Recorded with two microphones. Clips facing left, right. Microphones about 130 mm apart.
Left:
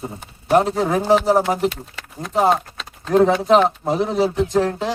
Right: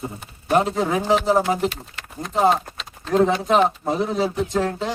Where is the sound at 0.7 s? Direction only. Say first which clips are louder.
Left 3 dB; centre (ahead or behind).